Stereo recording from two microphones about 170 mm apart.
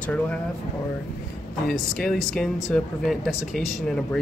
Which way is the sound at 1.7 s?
5° left (ahead or behind).